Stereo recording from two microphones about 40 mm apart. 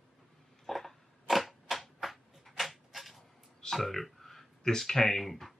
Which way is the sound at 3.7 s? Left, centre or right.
Centre.